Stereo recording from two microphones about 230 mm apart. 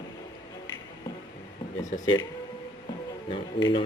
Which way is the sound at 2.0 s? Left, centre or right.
Centre.